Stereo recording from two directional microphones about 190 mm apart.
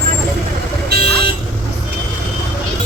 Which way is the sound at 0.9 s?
60° right (ahead or behind).